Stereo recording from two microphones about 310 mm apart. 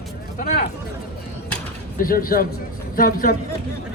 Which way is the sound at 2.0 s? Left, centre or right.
Left.